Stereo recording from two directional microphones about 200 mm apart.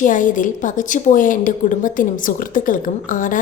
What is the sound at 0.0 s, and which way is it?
A woman's voice, 40° left (ahead or behind).